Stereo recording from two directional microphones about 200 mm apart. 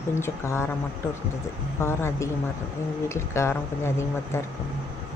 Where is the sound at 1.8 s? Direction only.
10° left (ahead or behind).